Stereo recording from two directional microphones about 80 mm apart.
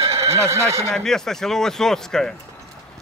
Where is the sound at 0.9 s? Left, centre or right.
Centre.